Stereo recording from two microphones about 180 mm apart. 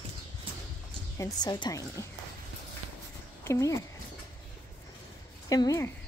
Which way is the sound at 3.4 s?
15° left (ahead or behind).